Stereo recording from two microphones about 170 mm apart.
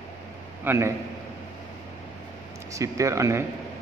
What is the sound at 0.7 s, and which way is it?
Speech, 15° right (ahead or behind).